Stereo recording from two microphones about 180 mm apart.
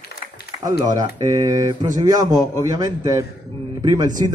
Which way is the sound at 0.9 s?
20° right (ahead or behind).